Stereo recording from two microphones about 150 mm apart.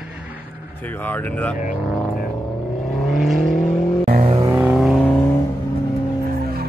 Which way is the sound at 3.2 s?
Centre (ahead or behind).